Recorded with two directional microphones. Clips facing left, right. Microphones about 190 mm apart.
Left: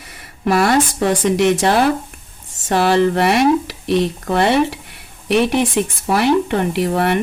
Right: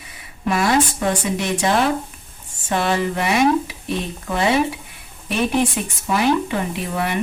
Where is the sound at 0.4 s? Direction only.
65° left (ahead or behind).